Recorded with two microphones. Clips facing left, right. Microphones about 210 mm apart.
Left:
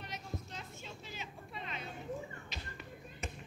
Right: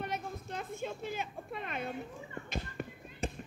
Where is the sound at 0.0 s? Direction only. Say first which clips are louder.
Right 6 dB; 55° right (ahead or behind).